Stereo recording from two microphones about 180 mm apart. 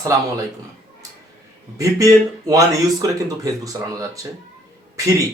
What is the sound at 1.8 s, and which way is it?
A man's voice, 20° right (ahead or behind).